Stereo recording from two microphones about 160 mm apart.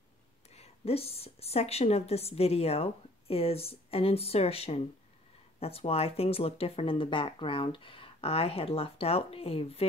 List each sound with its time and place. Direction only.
0.5 s a woman's voice: 40° left (ahead or behind)